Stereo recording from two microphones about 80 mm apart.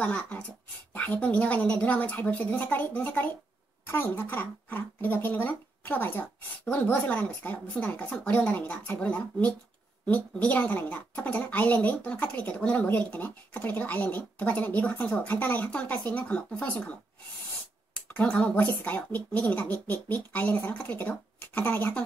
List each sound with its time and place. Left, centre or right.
0.0 s a woman's voice: centre
18.1 s speech: centre